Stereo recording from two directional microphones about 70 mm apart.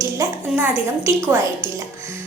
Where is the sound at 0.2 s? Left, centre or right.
Right.